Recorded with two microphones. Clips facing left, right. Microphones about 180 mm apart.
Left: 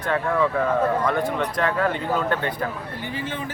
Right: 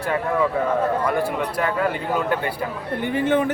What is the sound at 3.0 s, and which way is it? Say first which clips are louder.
Speech: right 13 dB; 60° right (ahead or behind).